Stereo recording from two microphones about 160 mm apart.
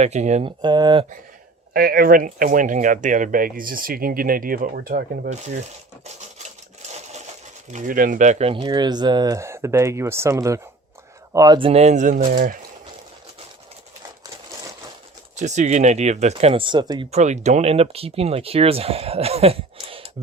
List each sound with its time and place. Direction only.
0.0 s speech: 45° right (ahead or behind)
0.4 s speech: 30° right (ahead or behind)
1.7 s speech: 65° right (ahead or behind)
5.3 s speech: 45° right (ahead or behind)
7.7 s speech: 55° right (ahead or behind)
8.5 s speech: 25° right (ahead or behind); by 12.5 s 60° right (ahead or behind)
15.4 s speech: 45° right (ahead or behind); by 17.1 s 25° right (ahead or behind)
17.1 s speech: 45° right (ahead or behind)